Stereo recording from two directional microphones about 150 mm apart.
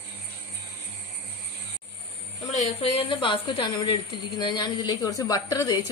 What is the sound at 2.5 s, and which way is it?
A woman's voice, 45° left (ahead or behind).